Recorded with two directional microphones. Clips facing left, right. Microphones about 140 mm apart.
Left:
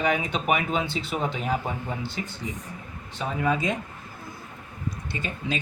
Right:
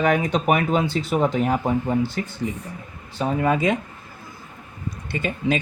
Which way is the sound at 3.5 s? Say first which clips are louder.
Right 6 dB; 65° right (ahead or behind).